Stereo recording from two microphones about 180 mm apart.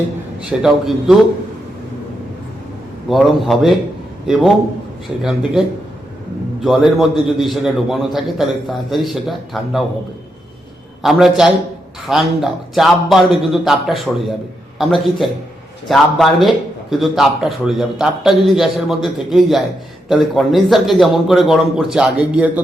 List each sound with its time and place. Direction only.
0.6 s a man's voice: centre (ahead or behind)
3.1 s a man's voice: centre (ahead or behind)
5.2 s a man's voice: 5° right (ahead or behind)
11.0 s a man's voice: centre (ahead or behind)